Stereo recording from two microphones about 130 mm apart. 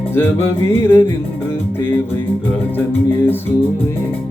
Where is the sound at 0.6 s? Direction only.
20° left (ahead or behind).